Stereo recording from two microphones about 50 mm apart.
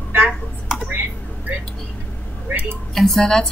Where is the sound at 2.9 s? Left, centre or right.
Centre.